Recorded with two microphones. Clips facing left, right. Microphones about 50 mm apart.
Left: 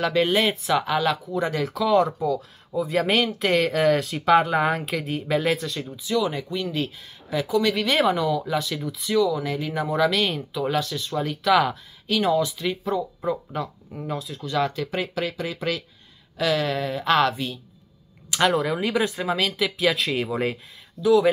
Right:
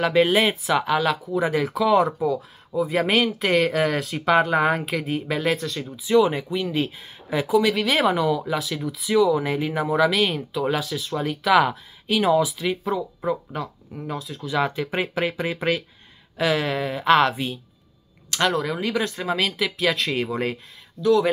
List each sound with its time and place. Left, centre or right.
0.0 s speech: centre
6.0 s speech: right
6.5 s speech: centre
9.1 s speech: right
9.8 s speech: centre
14.6 s speech: centre
18.3 s speech: centre